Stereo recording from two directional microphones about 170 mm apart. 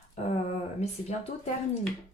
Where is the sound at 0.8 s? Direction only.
40° left (ahead or behind).